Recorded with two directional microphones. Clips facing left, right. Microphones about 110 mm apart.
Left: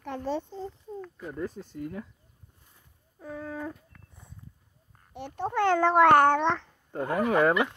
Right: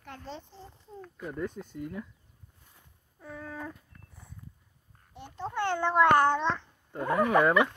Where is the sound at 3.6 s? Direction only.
20° left (ahead or behind).